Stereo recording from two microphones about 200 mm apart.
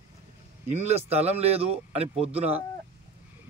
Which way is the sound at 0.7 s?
30° right (ahead or behind).